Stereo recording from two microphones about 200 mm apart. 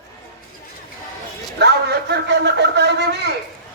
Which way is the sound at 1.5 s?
55° right (ahead or behind).